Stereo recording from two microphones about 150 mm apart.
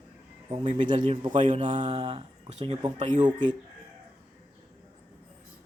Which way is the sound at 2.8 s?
30° right (ahead or behind).